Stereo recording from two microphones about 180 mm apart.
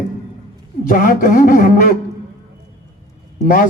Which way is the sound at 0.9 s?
50° left (ahead or behind).